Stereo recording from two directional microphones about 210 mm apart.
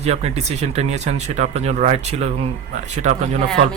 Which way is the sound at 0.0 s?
30° right (ahead or behind).